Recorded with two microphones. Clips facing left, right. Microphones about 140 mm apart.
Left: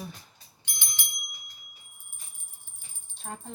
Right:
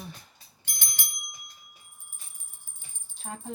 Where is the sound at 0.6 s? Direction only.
45° right (ahead or behind).